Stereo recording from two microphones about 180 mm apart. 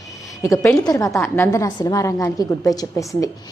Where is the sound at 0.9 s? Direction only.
20° left (ahead or behind).